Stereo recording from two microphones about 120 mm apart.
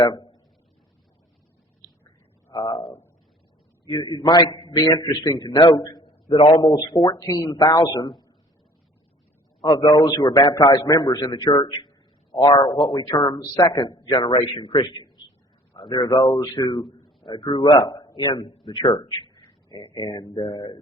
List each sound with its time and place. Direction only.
0.0 s a man's voice: 35° left (ahead or behind)
1.8 s a sound: 35° left (ahead or behind)
2.5 s a man's voice: 45° left (ahead or behind)
6.6 s a man's voice: 35° left (ahead or behind)
9.6 s a man's voice: 35° left (ahead or behind)
16.8 s a sound: centre (ahead or behind)
17.2 s a man's voice: 45° left (ahead or behind)